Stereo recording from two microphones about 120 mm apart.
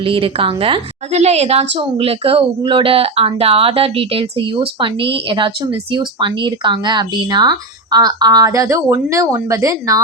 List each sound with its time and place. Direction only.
0.0 s a woman's voice: 45° right (ahead or behind); by 10.0 s 25° right (ahead or behind)